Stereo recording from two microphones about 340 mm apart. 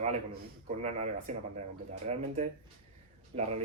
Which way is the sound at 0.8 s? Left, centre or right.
Centre.